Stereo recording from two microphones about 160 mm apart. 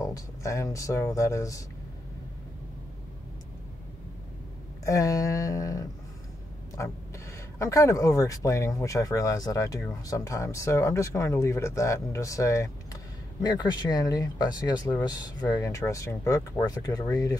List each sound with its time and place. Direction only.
0.0 s speech: 20° left (ahead or behind)
4.8 s speech: 20° left (ahead or behind)
7.5 s speech: 20° left (ahead or behind)